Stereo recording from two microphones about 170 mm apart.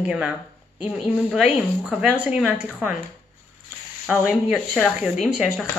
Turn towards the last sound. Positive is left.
turn(degrees=-5)  # may be behind; listen again after turning